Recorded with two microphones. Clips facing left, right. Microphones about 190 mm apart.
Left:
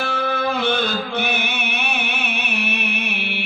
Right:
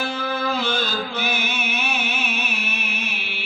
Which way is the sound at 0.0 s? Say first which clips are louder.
Left 3 dB; 60° left (ahead or behind).